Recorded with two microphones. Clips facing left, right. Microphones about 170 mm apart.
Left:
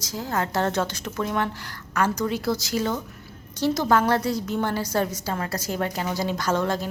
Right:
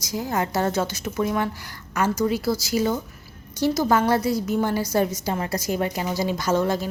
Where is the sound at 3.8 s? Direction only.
Centre (ahead or behind).